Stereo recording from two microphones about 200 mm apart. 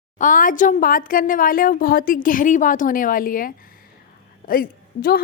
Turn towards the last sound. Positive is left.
turn(degrees=45)  # may be behind; listen again after turning